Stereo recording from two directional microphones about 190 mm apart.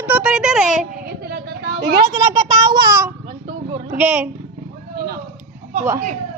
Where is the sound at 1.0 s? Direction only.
55° right (ahead or behind).